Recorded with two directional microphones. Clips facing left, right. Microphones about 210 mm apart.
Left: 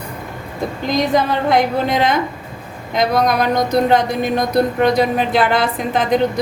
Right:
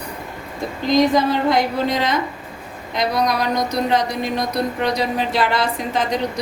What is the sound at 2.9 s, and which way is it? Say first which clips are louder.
Speech: left 4 dB; 50° left (ahead or behind).